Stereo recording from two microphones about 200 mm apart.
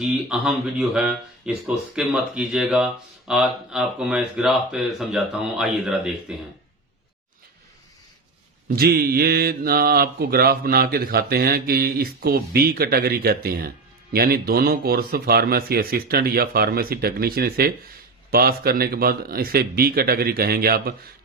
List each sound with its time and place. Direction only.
0.0 s speech: 5° right (ahead or behind)
8.7 s speech: 50° right (ahead or behind)